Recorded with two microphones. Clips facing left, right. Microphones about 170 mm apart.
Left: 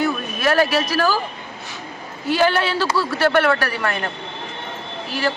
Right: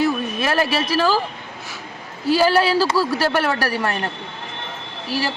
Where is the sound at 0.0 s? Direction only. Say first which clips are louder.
Right 1 dB; 30° right (ahead or behind).